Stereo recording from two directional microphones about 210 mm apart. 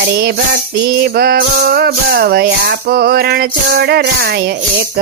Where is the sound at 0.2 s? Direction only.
50° right (ahead or behind).